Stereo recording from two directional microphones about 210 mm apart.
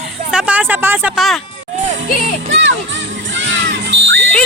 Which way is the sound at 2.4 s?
60° right (ahead or behind).